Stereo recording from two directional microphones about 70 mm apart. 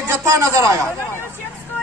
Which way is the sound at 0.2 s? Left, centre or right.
Right.